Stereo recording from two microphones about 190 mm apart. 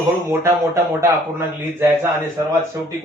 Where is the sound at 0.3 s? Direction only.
15° right (ahead or behind).